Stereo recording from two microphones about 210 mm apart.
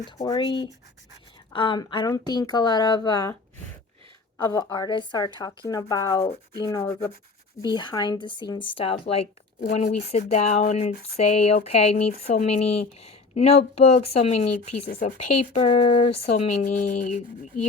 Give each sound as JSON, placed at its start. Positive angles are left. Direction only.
{"t": 0.2, "sound": "a woman's voice", "side_deg": 20}
{"t": 4.4, "sound": "a woman's voice", "side_deg": 20}
{"t": 9.6, "sound": "speech", "side_deg": 35}